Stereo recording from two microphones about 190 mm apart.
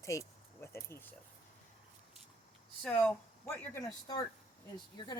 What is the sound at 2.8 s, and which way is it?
Speech, 10° left (ahead or behind).